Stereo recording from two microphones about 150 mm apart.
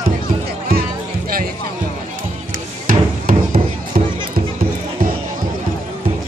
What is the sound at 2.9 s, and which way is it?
Hammer, 65° right (ahead or behind).